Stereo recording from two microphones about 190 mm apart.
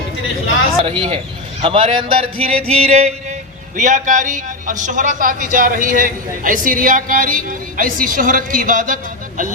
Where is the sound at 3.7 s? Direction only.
40° right (ahead or behind).